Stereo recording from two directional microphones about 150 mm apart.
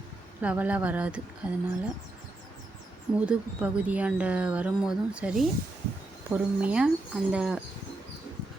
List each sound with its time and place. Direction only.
0.4 s speech: 10° right (ahead or behind)
3.2 s speech: 10° right (ahead or behind)